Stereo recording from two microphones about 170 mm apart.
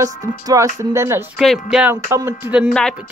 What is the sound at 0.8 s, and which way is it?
Speech, 15° right (ahead or behind).